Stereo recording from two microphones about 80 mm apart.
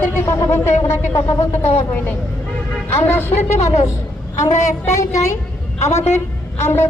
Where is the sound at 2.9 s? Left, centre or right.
Left.